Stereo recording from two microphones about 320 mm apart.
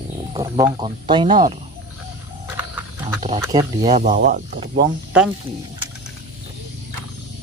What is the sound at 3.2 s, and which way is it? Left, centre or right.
Speech, centre.